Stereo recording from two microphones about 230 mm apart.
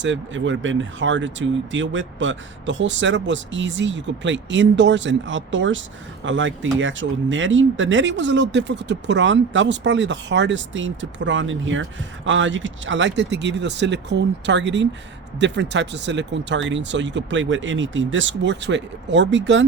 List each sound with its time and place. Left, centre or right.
0.0 s speech: right